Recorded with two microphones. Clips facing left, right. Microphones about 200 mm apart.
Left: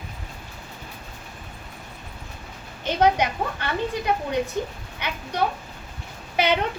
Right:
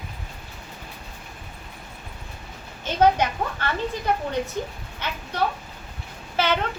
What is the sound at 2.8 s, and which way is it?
Speech, 15° left (ahead or behind).